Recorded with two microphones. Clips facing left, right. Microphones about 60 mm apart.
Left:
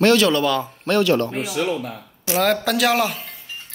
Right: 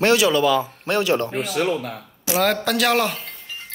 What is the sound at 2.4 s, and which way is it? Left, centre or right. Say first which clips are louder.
Speech: left 1 dB; centre.